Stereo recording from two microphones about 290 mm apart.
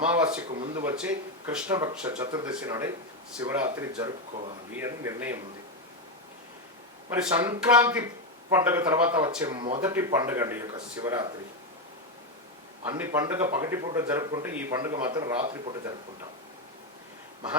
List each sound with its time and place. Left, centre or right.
0.1 s speech: centre
0.4 s speech: centre
0.8 s speech: centre
7.1 s speech: centre
12.8 s speech: centre